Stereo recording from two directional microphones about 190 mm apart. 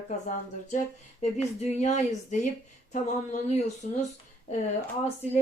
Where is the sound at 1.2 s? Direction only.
40° left (ahead or behind).